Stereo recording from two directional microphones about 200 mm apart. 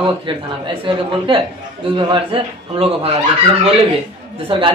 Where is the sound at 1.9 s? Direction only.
25° right (ahead or behind).